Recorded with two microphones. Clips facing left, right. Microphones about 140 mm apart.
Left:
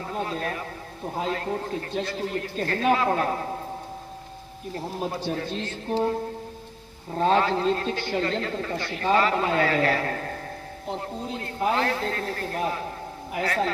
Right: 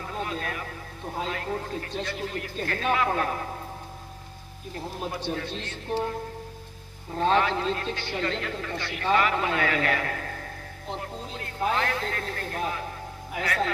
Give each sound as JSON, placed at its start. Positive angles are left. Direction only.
{"t": 0.2, "sound": "a man's voice", "side_deg": 35}
{"t": 5.1, "sound": "a man's voice", "side_deg": 30}
{"t": 7.2, "sound": "a man's voice", "side_deg": 35}